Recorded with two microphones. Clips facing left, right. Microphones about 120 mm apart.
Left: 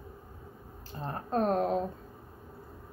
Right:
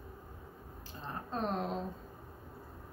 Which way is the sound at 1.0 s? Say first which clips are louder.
Left 8 dB; 50° left (ahead or behind).